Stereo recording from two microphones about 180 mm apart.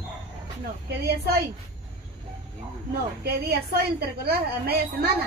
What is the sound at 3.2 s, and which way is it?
A woman's voice, 60° right (ahead or behind).